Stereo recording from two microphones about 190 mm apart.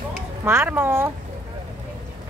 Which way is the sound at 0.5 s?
10° right (ahead or behind).